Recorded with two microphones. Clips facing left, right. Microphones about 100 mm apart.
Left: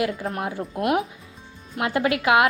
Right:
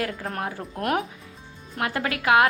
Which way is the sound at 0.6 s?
5° left (ahead or behind).